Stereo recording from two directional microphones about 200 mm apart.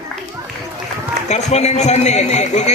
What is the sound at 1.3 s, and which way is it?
A man's voice, 35° left (ahead or behind).